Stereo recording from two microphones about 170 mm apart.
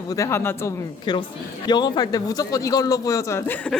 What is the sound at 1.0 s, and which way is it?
A man's voice, 25° left (ahead or behind).